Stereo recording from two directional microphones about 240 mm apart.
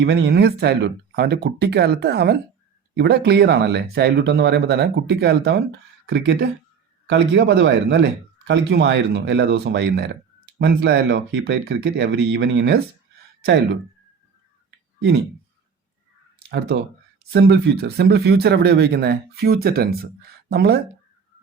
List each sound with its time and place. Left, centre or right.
0.0 s speech: right
16.5 s speech: right